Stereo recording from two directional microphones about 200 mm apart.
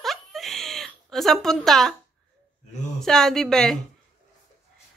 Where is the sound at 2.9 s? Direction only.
Centre (ahead or behind).